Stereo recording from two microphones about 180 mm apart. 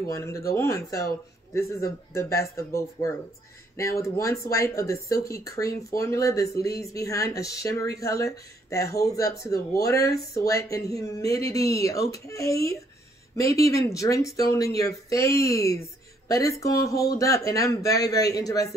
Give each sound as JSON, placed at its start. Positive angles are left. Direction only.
{"t": 0.0, "sound": "a man's voice", "side_deg": 15}